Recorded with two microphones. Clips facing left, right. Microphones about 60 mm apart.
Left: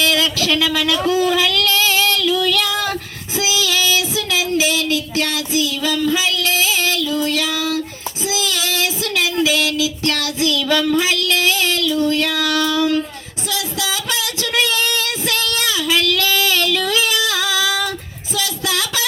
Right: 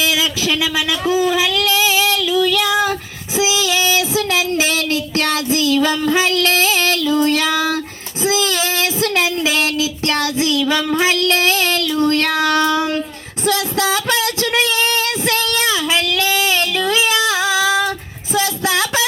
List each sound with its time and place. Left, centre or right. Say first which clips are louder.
0.0 s speech: left 1 dB; centre
3.3 s child singing: right 2 dB; right
10.6 s child singing: left 1 dB; centre; by 13.0 s right
13.5 s music: right 6 dB; right
18.3 s a sound: right 5 dB; right